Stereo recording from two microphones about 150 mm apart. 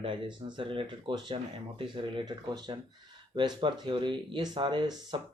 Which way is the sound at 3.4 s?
30° right (ahead or behind).